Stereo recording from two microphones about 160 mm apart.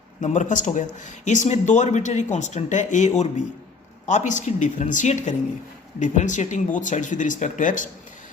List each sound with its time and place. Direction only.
0.2 s speech: 50° left (ahead or behind)